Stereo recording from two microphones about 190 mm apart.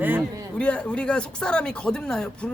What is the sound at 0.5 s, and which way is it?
Speech, 5° left (ahead or behind).